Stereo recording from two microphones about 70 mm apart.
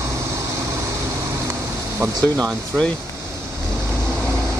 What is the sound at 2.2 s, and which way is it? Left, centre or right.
Speech, right.